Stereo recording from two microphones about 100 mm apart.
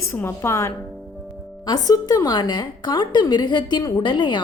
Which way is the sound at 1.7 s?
40° left (ahead or behind).